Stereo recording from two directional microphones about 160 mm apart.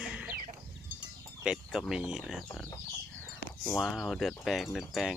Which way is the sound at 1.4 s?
Centre (ahead or behind).